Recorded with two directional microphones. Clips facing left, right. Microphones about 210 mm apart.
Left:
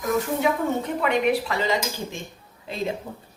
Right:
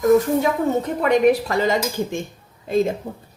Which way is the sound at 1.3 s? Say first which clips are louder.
Right 5 dB; 45° right (ahead or behind).